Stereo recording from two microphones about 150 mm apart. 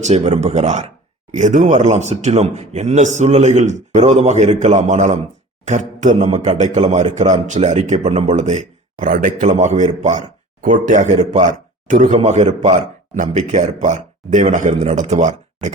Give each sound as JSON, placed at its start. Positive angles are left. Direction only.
{"t": 0.0, "sound": "a man's voice", "side_deg": -45}